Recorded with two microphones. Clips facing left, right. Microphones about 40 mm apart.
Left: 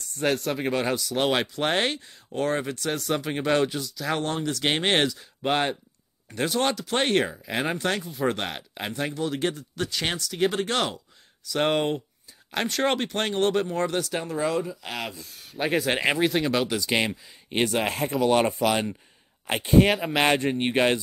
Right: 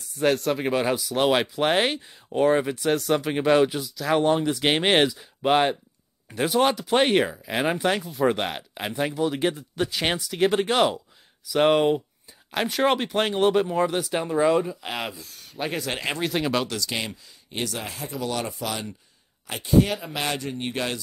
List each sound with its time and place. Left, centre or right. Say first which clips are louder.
0.0 s speech: right 3 dB; centre
4.2 s speech: right 6 dB; centre
10.3 s speech: right 3 dB; centre
15.2 s speech: left 2 dB; centre
16.3 s speech: left 1 dB; centre
16.6 s speech: left 4 dB; left